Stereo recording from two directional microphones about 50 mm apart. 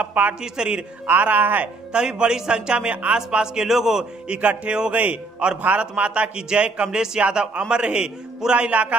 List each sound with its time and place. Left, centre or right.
0.0 s speech: right
0.4 s a man's voice: centre
1.2 s speech: right
1.9 s speech: centre
3.2 s a man's voice: centre
4.3 s speech: right
4.9 s speech: right
5.4 s speech: centre